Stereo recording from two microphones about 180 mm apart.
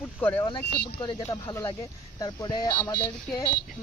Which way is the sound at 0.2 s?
10° left (ahead or behind).